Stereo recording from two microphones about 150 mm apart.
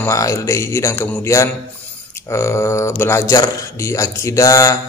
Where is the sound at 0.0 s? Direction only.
20° left (ahead or behind).